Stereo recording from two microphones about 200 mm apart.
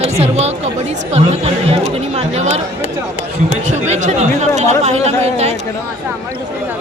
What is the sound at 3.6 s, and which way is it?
Chatter, 35° right (ahead or behind).